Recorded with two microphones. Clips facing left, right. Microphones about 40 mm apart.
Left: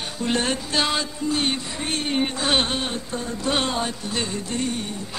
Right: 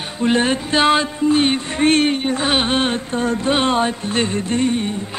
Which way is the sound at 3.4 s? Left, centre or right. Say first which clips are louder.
Right 5 dB; right.